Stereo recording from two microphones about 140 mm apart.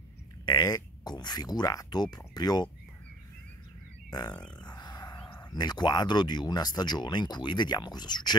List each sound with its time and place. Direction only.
0.5 s speech: 25° left (ahead or behind)
4.1 s a sound: 30° left (ahead or behind)
5.5 s speech: 30° left (ahead or behind)